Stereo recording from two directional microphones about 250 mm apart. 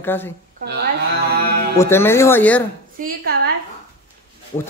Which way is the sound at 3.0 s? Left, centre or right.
Right.